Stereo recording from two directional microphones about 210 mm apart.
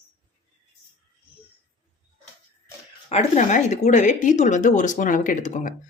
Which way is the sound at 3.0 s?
35° left (ahead or behind).